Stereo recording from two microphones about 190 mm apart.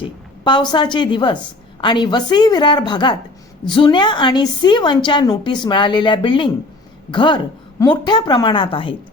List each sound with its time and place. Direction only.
0.0 s a woman's voice: 25° left (ahead or behind)